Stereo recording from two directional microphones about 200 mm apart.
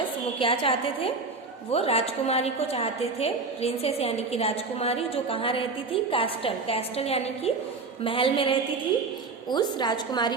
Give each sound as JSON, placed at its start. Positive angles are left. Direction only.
{"t": 0.3, "sound": "a woman's voice", "side_deg": 25}